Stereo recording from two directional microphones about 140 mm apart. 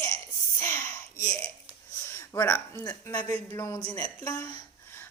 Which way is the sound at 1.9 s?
20° left (ahead or behind).